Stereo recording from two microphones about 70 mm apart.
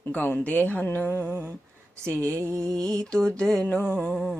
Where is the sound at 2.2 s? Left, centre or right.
Right.